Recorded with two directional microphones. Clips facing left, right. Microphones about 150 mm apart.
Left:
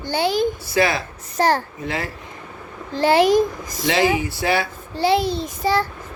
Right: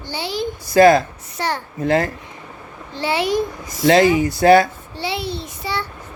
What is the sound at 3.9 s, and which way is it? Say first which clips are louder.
Speech: right 6 dB; 45° right (ahead or behind).